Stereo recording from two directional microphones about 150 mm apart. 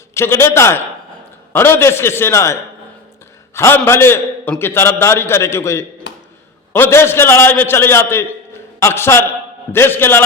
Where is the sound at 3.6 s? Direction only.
15° left (ahead or behind).